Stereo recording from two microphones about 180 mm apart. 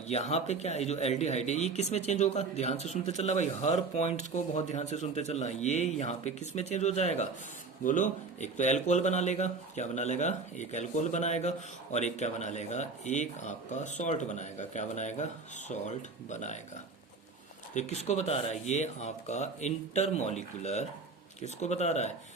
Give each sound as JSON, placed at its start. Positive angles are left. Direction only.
{"t": 0.1, "sound": "speech", "side_deg": 35}
{"t": 17.7, "sound": "speech", "side_deg": 40}